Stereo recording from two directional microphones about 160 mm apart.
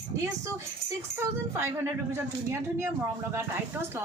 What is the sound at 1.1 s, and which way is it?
Speech, 15° right (ahead or behind).